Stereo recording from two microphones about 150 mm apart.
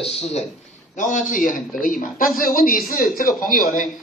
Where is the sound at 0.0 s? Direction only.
45° left (ahead or behind).